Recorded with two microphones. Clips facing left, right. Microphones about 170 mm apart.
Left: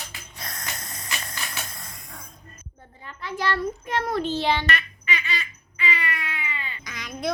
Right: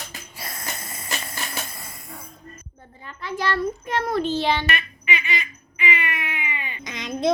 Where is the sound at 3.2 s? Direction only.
15° left (ahead or behind).